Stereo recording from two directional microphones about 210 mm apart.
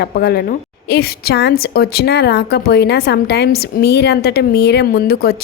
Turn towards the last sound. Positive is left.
turn(degrees=45)  # may be behind; listen again after turning